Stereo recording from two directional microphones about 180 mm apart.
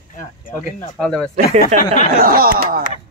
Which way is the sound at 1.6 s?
50° left (ahead or behind).